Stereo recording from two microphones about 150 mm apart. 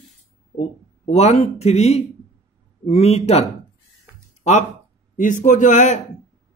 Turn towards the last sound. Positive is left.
turn(degrees=55)  # may be behind; listen again after turning